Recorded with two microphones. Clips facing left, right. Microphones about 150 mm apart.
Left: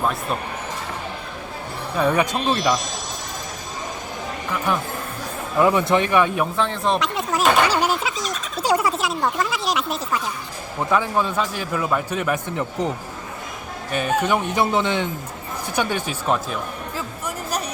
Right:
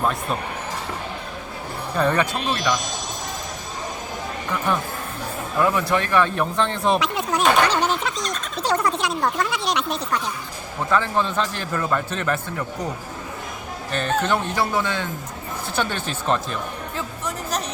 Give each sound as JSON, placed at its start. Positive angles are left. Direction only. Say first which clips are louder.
{"t": 0.0, "sound": "speech", "louder": "even", "side_deg": 5}
{"t": 2.0, "sound": "speech", "louder": "left 1 dB", "side_deg": 5}
{"t": 5.5, "sound": "a man's voice", "louder": "left 3 dB", "side_deg": 20}
{"t": 13.9, "sound": "a man's voice", "louder": "left 1 dB", "side_deg": 10}
{"t": 17.0, "sound": "a sound", "louder": "right 2 dB", "side_deg": 10}